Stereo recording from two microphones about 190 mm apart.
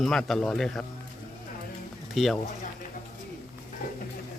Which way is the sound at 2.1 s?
Centre (ahead or behind).